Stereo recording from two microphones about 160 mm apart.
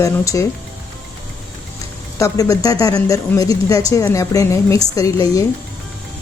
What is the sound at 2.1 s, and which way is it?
Speech, 20° left (ahead or behind).